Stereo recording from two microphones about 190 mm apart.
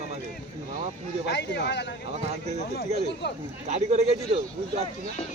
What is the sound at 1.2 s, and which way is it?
Speech, 65° left (ahead or behind).